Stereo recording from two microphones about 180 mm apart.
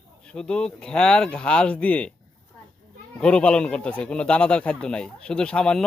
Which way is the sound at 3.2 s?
5° left (ahead or behind).